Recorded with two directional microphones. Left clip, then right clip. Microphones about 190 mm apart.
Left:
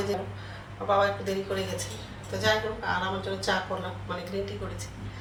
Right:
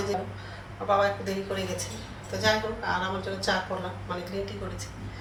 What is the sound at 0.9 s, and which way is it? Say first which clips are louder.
Speech: even; centre (ahead or behind).